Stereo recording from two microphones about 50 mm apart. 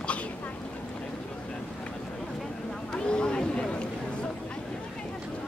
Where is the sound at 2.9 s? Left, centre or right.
Left.